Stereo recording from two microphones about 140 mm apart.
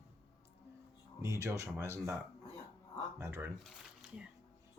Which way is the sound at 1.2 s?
20° right (ahead or behind).